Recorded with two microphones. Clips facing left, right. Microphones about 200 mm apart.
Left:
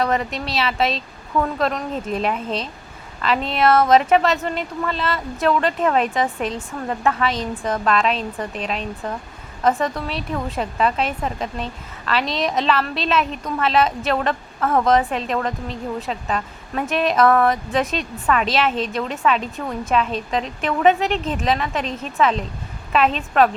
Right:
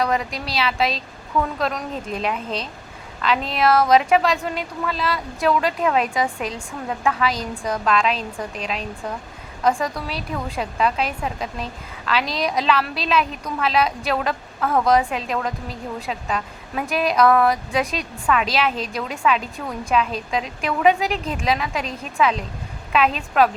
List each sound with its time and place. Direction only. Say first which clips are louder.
0.0 s a woman's voice: left 1 dB; centre (ahead or behind)